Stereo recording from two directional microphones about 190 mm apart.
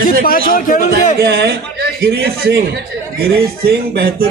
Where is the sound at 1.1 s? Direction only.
60° right (ahead or behind).